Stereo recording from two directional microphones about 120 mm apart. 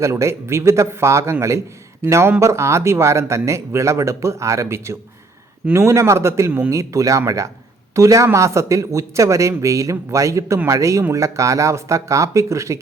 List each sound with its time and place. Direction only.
0.0 s speech: 25° right (ahead or behind)